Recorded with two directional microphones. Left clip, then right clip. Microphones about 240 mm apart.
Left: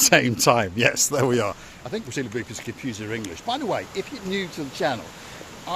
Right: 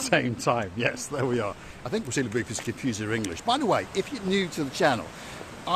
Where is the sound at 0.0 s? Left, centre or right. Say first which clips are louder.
Left 7 dB; left.